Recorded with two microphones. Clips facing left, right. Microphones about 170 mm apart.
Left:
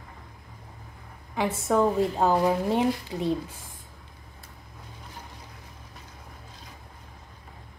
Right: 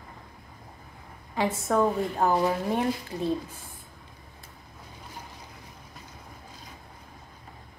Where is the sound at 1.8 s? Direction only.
20° left (ahead or behind).